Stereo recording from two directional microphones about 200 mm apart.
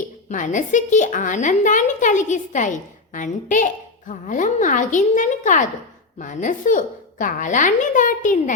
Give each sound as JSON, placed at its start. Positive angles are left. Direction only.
{"t": 0.3, "sound": "a woman's voice", "side_deg": 40}